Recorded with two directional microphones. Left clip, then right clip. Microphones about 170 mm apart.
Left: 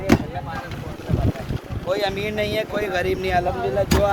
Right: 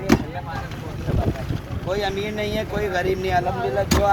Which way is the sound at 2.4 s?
20° left (ahead or behind).